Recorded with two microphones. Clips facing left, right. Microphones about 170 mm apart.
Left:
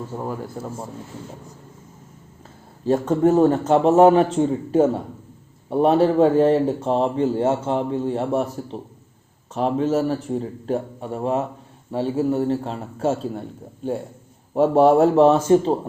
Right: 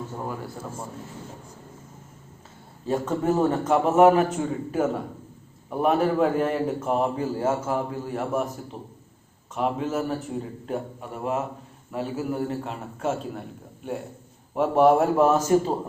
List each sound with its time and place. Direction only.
0.1 s speech: 10° left (ahead or behind)
3.2 s a man's voice: 30° left (ahead or behind)
9.6 s a man's voice: 30° left (ahead or behind)